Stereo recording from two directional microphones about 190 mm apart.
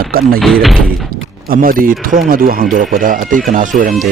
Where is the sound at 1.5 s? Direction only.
45° right (ahead or behind).